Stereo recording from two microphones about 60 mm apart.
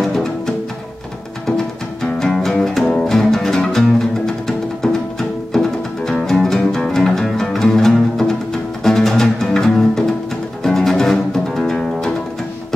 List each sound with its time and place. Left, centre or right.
0.0 s music: centre
2.0 s music: centre